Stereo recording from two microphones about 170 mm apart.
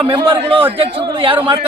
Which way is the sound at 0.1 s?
30° right (ahead or behind).